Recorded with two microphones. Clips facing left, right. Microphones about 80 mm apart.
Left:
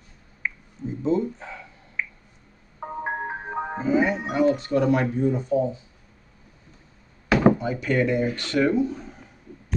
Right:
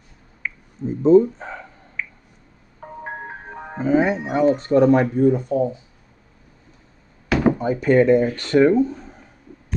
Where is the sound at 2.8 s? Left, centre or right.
Centre.